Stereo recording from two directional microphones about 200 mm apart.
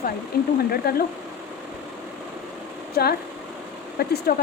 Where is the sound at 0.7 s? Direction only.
50° left (ahead or behind).